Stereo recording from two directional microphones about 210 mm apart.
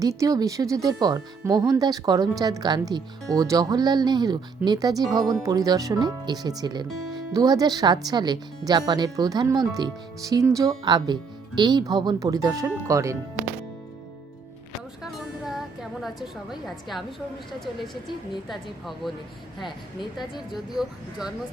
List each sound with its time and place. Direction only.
0.0 s speech: 15° right (ahead or behind)
15.0 s music: centre (ahead or behind)
18.4 s speech: centre (ahead or behind)